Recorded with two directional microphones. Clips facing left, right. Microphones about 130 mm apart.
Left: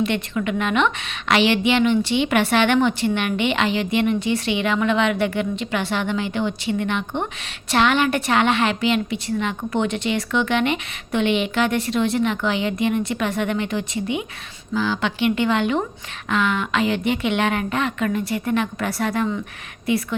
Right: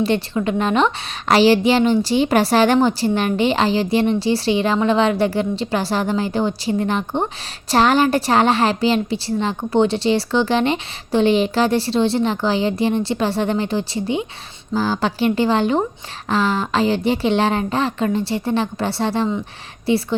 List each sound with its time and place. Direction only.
0.0 s a woman's voice: 35° right (ahead or behind)